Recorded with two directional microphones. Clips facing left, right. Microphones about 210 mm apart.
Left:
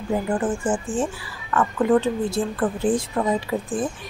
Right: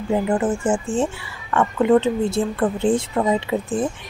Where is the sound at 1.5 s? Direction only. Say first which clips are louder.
Right 3 dB; 25° right (ahead or behind).